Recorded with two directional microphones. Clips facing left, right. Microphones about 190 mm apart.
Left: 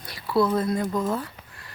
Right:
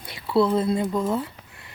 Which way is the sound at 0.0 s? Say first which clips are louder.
Right 2 dB; 25° right (ahead or behind).